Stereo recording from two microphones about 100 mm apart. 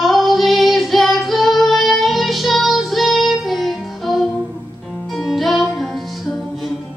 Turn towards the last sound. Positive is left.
turn(degrees=0)  # may be behind; listen again after turning